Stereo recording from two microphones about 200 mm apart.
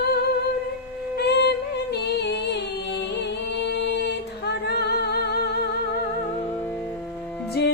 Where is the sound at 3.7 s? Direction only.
55° left (ahead or behind).